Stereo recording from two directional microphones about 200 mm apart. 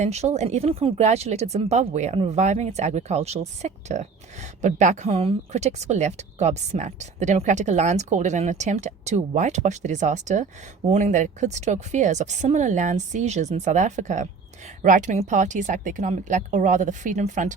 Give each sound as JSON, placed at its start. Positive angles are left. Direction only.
{"t": 0.0, "sound": "speech", "side_deg": -35}